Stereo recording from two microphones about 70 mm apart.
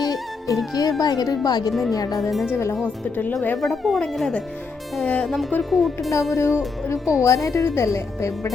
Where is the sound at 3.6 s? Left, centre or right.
Centre.